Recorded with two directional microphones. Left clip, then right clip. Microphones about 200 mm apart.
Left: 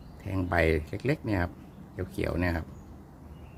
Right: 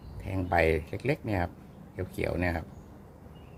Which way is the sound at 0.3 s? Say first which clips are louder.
Right 1 dB; 5° left (ahead or behind).